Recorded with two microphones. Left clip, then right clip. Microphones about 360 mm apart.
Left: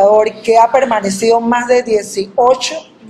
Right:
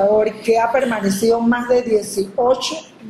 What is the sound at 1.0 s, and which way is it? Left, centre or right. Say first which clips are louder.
A woman's voice: left 4 dB; centre.